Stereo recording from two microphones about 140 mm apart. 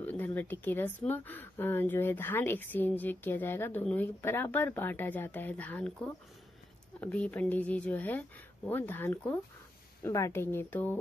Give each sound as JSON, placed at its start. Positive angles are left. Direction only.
{"t": 0.0, "sound": "speech", "side_deg": 15}